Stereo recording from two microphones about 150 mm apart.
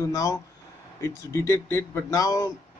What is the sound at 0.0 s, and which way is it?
Speech, 20° left (ahead or behind).